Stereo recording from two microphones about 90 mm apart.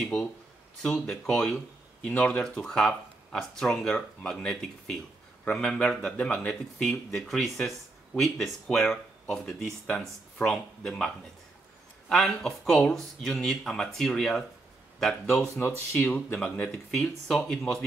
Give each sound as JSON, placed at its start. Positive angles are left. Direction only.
{"t": 0.0, "sound": "speech", "side_deg": 10}
{"t": 12.1, "sound": "speech", "side_deg": 5}
{"t": 15.6, "sound": "speech", "side_deg": 25}
{"t": 16.1, "sound": "speech", "side_deg": 15}